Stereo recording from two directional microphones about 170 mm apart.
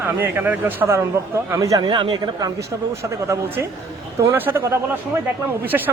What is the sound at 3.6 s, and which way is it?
A man's voice, 15° right (ahead or behind).